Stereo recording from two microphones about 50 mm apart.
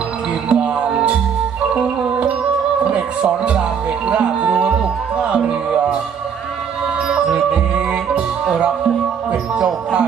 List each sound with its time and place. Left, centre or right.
0.5 s music: centre
2.8 s music: right
7.0 s music: centre